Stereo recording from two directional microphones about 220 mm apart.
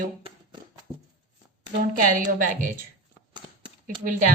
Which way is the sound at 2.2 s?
35° right (ahead or behind).